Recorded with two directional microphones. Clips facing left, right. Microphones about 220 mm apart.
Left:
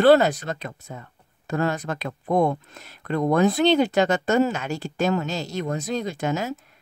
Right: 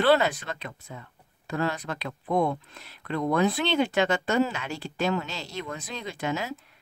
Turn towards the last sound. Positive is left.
turn(degrees=45)  # may be behind; listen again after turning